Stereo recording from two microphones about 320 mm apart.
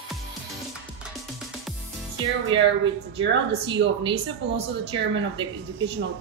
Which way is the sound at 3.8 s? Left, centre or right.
Right.